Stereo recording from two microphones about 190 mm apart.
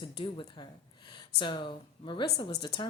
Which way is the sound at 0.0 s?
25° left (ahead or behind).